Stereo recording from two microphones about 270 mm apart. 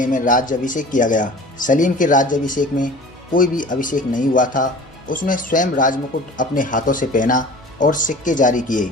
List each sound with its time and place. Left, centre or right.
0.0 s speech: left